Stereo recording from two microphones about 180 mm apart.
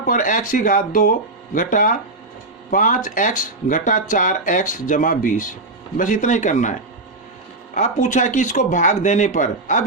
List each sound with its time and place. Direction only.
0.0 s speech: 50° left (ahead or behind)